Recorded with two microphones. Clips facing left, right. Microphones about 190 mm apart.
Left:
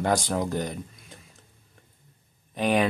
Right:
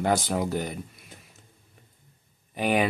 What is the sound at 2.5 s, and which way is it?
Speech, 5° right (ahead or behind).